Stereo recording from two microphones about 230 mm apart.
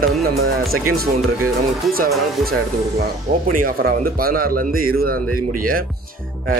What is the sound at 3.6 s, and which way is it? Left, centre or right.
Speech, right.